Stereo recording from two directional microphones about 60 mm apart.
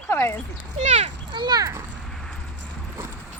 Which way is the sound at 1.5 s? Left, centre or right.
Right.